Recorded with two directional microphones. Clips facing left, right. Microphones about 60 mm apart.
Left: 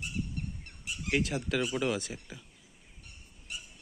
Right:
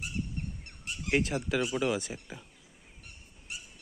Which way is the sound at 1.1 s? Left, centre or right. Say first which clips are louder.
Right 2 dB; right.